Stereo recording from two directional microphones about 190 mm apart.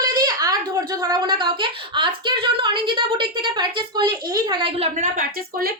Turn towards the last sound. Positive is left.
turn(degrees=-50)  # may be behind; listen again after turning